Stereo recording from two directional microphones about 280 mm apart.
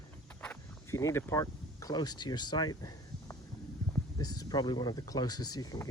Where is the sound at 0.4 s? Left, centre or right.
Centre.